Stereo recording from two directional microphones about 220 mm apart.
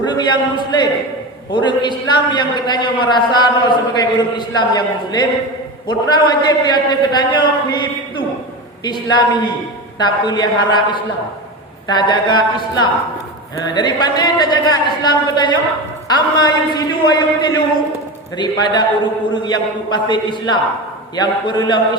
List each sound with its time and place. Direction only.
0.0 s a man's voice: 20° left (ahead or behind)